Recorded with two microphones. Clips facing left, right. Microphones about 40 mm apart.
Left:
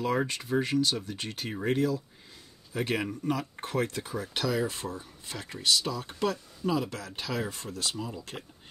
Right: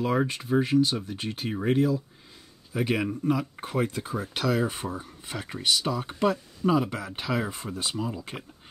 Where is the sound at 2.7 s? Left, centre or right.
Centre.